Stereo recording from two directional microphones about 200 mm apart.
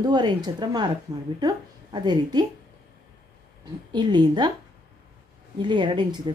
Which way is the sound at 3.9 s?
20° right (ahead or behind).